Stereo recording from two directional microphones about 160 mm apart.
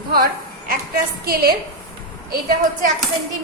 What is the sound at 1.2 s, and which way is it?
Speech, 70° right (ahead or behind).